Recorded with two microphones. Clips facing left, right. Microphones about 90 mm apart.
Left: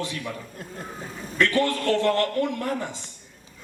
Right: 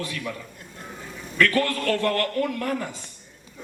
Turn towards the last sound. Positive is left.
turn(degrees=25)  # may be behind; listen again after turning